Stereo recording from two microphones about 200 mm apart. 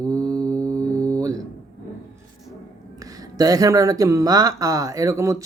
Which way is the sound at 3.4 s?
20° right (ahead or behind).